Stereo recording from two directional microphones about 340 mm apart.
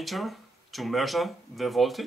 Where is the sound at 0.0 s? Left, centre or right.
Centre.